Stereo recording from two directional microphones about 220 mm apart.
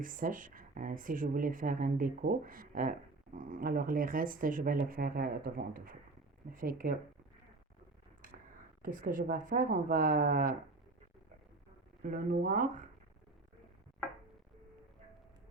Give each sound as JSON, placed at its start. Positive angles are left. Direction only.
{"t": 0.0, "sound": "speech", "side_deg": -40}
{"t": 8.8, "sound": "speech", "side_deg": -40}
{"t": 12.0, "sound": "speech", "side_deg": -40}